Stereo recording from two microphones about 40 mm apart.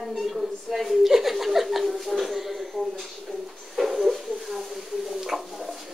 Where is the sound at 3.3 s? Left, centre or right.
Centre.